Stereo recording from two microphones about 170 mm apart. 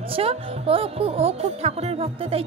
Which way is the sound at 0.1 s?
35° right (ahead or behind).